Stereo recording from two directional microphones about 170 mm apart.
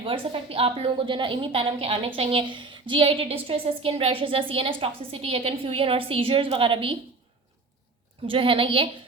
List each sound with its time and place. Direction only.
0.0 s a woman's voice: 30° right (ahead or behind)
8.3 s a woman's voice: 30° right (ahead or behind)